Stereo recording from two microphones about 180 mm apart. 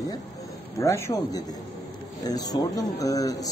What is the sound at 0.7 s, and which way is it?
A man's voice, 15° left (ahead or behind).